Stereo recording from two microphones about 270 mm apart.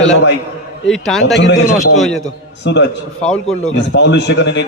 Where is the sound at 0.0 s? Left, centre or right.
Left.